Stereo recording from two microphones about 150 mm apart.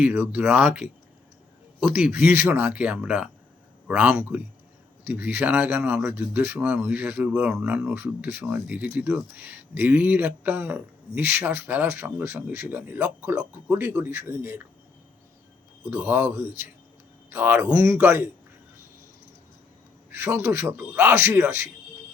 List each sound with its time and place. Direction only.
0.0 s speech: 10° right (ahead or behind)
15.9 s speech: 15° right (ahead or behind)
20.1 s speech: 15° right (ahead or behind)